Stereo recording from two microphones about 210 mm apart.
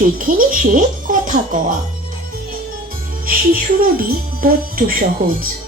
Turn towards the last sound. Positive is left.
turn(degrees=-45)  # may be behind; listen again after turning